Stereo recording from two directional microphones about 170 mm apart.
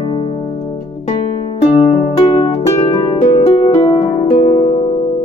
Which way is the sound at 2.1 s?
35° left (ahead or behind).